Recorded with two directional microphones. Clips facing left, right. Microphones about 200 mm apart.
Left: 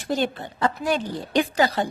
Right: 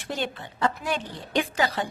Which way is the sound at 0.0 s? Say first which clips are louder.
Left 6 dB; 40° left (ahead or behind).